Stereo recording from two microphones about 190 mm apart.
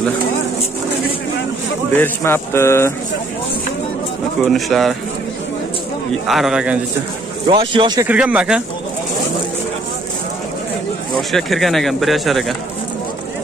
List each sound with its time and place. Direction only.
2.0 s speech: 10° left (ahead or behind)
4.4 s speech: centre (ahead or behind)
6.2 s speech: centre (ahead or behind)
7.4 s speech: 25° right (ahead or behind)
8.1 s speech: 5° right (ahead or behind)
11.1 s speech: centre (ahead or behind)